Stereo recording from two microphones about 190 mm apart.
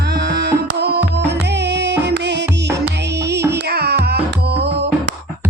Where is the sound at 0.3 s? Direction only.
60° right (ahead or behind).